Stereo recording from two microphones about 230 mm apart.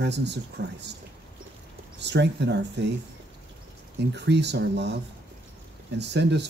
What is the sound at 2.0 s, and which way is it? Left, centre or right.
Speech, right.